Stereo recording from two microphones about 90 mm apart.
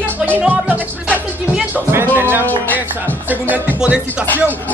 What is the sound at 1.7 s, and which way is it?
Music, 25° right (ahead or behind).